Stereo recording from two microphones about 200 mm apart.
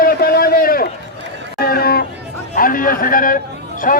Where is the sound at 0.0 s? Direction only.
50° left (ahead or behind).